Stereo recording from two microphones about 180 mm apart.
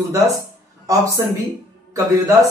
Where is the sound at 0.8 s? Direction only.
20° right (ahead or behind).